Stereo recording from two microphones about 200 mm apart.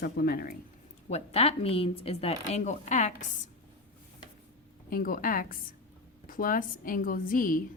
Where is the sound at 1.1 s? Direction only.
30° left (ahead or behind).